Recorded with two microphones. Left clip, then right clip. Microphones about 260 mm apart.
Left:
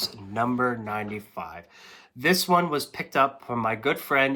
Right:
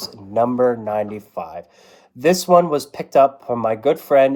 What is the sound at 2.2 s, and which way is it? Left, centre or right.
Speech, left.